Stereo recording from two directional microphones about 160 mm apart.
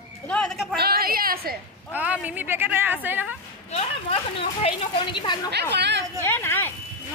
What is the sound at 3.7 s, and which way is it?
Speech, 35° left (ahead or behind).